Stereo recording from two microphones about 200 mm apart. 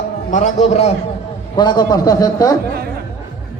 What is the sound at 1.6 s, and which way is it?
Speech, 20° left (ahead or behind).